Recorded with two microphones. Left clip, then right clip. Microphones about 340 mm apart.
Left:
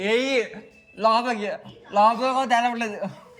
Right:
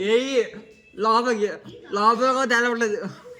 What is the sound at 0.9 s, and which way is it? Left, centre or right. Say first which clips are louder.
Speech: even; left.